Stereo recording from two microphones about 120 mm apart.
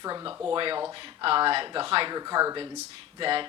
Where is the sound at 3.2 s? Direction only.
45° right (ahead or behind).